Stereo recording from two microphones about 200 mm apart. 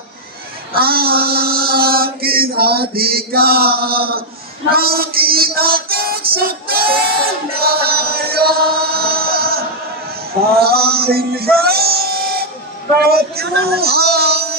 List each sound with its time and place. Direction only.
0.7 s mantra: 50° right (ahead or behind)
4.6 s female singing: 50° right (ahead or behind)
10.5 s a sound: 50° right (ahead or behind)
13.0 s speech: 50° right (ahead or behind)